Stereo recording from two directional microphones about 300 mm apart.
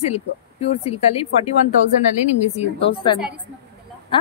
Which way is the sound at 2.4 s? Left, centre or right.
Left.